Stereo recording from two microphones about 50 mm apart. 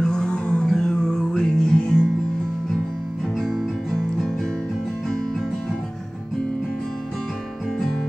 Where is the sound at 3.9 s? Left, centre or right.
Centre.